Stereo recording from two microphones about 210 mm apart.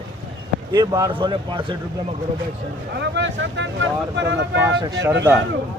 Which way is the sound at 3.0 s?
60° right (ahead or behind).